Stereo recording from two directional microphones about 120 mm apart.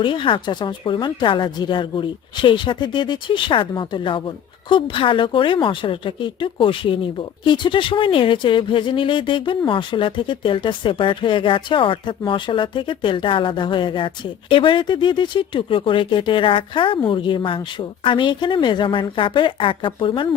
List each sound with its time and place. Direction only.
0.0 s speech: 45° left (ahead or behind)